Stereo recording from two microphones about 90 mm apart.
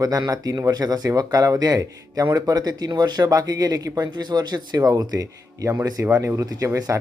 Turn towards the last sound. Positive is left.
turn(degrees=-40)  # may be behind; listen again after turning